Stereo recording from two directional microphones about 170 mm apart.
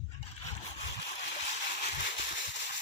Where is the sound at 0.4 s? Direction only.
40° left (ahead or behind).